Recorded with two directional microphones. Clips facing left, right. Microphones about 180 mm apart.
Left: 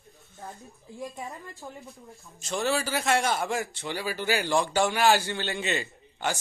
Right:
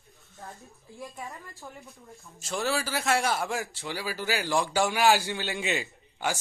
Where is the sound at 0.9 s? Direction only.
20° left (ahead or behind).